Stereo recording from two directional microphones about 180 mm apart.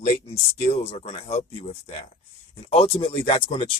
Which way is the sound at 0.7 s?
35° left (ahead or behind).